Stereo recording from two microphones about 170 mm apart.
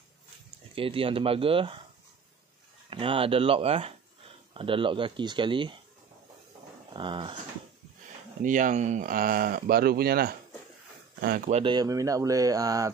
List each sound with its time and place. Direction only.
0.7 s speech: 30° right (ahead or behind)
2.9 s speech: 30° right (ahead or behind)
6.9 s speech: 30° right (ahead or behind)
8.4 s speech: 50° right (ahead or behind)
11.5 s speech: 25° right (ahead or behind)